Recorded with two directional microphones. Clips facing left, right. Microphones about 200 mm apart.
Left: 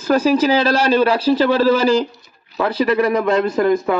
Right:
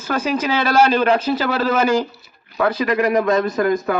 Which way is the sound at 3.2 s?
30° left (ahead or behind).